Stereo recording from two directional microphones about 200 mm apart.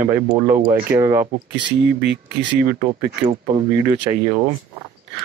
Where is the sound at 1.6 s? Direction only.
60° right (ahead or behind).